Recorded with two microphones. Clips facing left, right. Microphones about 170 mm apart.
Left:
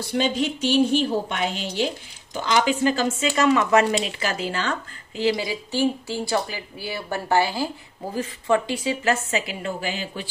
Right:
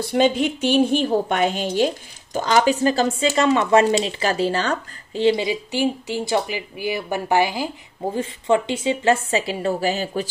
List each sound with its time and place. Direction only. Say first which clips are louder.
0.0 s a woman's voice: right 5 dB; 55° right (ahead or behind)